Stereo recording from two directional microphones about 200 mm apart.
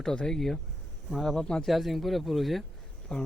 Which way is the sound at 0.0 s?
5° left (ahead or behind).